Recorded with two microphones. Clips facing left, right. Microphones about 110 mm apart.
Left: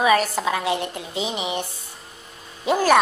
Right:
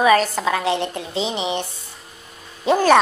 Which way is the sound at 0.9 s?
25° right (ahead or behind).